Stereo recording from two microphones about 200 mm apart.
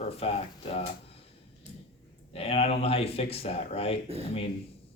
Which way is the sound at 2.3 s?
30° left (ahead or behind).